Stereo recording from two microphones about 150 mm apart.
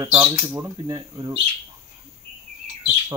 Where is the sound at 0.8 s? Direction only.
25° right (ahead or behind).